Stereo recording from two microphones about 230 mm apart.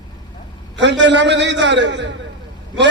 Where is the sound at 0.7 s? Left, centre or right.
Right.